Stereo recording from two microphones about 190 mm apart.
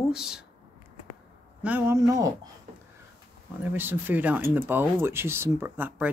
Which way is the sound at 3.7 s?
10° right (ahead or behind).